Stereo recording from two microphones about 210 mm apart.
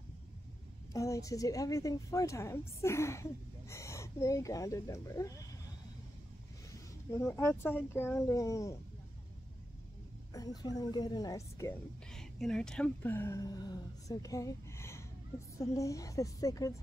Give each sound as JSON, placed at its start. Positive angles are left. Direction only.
{"t": 0.9, "sound": "a woman's voice", "side_deg": 15}
{"t": 6.7, "sound": "speech", "side_deg": 15}
{"t": 10.3, "sound": "a woman's voice", "side_deg": 20}
{"t": 12.1, "sound": "a woman's voice", "side_deg": 5}